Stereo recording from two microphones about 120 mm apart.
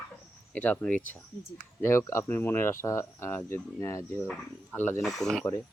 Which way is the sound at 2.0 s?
25° left (ahead or behind).